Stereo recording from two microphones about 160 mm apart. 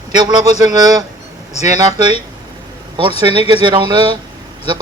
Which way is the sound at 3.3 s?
30° right (ahead or behind).